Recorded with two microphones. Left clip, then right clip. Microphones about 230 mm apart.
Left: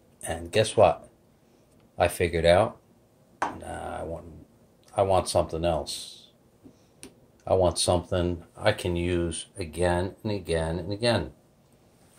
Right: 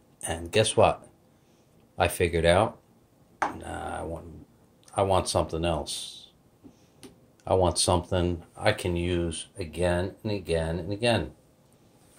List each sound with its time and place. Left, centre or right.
0.2 s speech: centre
2.0 s speech: centre
3.5 s a sound: centre
4.9 s speech: centre
7.4 s speech: centre